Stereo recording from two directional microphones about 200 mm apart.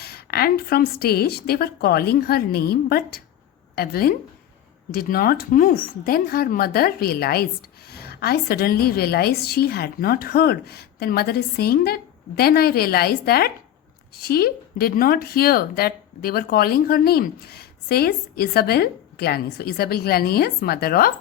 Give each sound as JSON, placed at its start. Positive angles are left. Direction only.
{"t": 0.0, "sound": "speech", "side_deg": 50}